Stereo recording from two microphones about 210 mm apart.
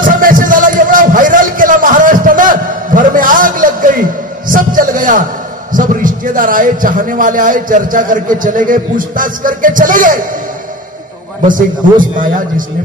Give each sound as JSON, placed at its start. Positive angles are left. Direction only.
{"t": 0.0, "sound": "music", "side_deg": -40}
{"t": 4.5, "sound": "a sound", "side_deg": -40}
{"t": 5.7, "sound": "a man's voice", "side_deg": -40}
{"t": 12.2, "sound": "a man's voice", "side_deg": -40}